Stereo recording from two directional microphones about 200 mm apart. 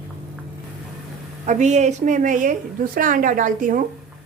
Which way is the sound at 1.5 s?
35° right (ahead or behind).